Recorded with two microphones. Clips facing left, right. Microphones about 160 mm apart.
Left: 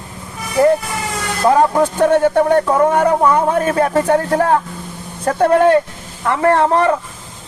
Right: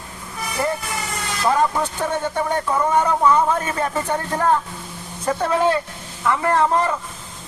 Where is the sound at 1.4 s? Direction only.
55° left (ahead or behind); by 4.6 s 70° left (ahead or behind).